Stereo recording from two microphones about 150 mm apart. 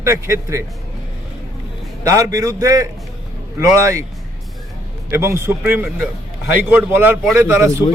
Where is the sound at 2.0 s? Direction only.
20° right (ahead or behind).